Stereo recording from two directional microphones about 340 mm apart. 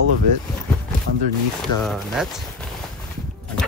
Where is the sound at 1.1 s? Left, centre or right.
Right.